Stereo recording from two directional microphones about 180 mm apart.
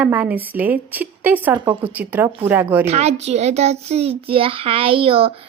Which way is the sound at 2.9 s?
35° right (ahead or behind).